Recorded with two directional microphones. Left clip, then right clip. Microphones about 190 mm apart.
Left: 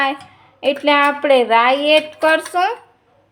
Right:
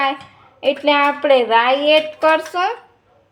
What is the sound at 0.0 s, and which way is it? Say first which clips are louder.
A woman's voice: even; 5° left (ahead or behind).